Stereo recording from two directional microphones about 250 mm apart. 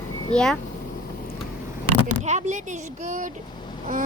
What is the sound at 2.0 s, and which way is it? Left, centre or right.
Speech, right.